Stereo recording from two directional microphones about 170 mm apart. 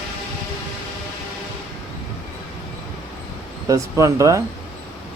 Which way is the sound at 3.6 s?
20° right (ahead or behind).